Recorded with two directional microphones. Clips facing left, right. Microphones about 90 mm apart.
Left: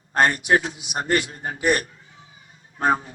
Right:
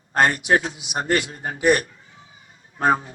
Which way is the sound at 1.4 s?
30° right (ahead or behind).